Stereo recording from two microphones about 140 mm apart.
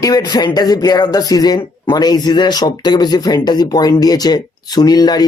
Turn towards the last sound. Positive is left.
turn(degrees=30)  # may be behind; listen again after turning